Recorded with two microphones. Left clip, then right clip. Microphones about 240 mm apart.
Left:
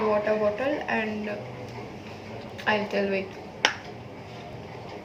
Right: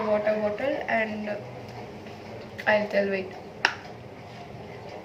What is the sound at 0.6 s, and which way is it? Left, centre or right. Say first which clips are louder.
Speech: right 1 dB; centre.